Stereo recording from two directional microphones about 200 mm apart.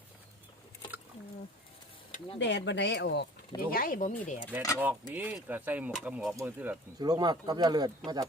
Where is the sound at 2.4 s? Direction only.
65° left (ahead or behind).